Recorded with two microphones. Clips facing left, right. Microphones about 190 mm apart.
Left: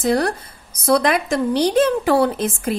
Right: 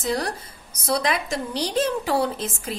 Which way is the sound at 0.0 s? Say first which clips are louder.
Left 7 dB; 60° left (ahead or behind).